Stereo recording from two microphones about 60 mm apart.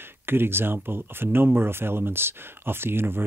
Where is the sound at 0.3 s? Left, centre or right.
Right.